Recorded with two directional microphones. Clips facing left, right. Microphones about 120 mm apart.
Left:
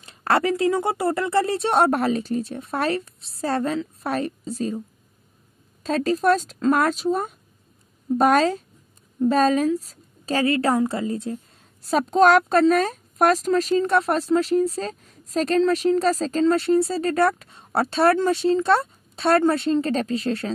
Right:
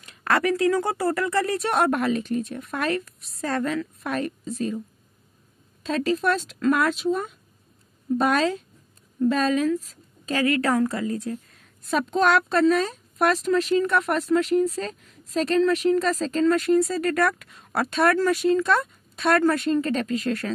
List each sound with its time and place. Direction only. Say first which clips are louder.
0.0 s a woman's voice: left 2 dB; 30° left (ahead or behind)
5.9 s a woman's voice: left 3 dB; 40° left (ahead or behind)